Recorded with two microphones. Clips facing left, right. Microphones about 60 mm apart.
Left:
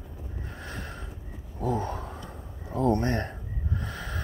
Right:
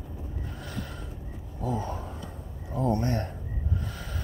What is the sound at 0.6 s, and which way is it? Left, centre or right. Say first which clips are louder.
Gasp: even; left.